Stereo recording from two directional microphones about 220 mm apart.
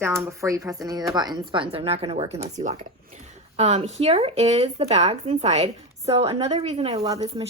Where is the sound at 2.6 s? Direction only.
35° right (ahead or behind).